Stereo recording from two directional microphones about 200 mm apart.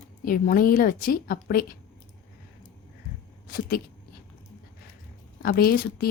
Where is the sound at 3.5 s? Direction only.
50° left (ahead or behind).